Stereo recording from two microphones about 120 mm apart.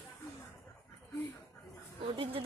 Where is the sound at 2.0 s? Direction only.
50° right (ahead or behind).